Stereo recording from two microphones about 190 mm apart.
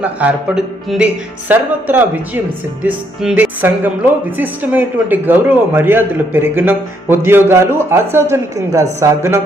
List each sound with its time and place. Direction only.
0.0 s a man's voice: 5° right (ahead or behind)